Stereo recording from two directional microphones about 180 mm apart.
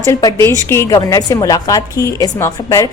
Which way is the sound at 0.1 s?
20° left (ahead or behind).